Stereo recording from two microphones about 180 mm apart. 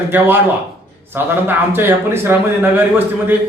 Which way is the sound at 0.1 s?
10° right (ahead or behind).